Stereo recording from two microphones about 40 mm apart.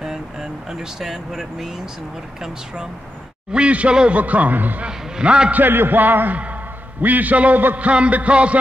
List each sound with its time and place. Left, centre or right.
0.0 s speech: centre
3.5 s a man's voice: right
4.1 s music: right
4.8 s a man's voice: right
5.5 s a man's voice: right
7.7 s music: right